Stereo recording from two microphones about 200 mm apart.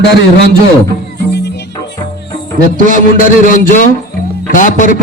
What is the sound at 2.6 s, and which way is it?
Speech, 40° right (ahead or behind).